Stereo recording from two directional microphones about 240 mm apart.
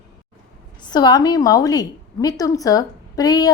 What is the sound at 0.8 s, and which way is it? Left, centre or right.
A woman's voice, centre.